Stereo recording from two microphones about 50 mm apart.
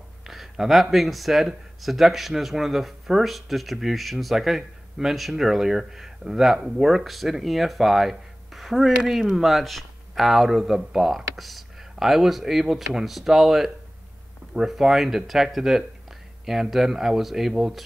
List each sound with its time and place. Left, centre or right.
0.2 s speech: centre